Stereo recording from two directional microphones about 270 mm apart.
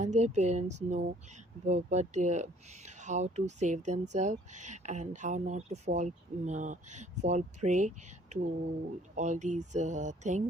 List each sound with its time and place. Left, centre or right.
0.0 s speech: right